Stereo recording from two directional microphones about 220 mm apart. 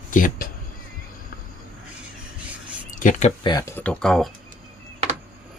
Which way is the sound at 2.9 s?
35° left (ahead or behind).